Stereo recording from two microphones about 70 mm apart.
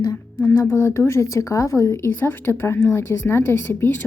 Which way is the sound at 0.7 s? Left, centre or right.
Left.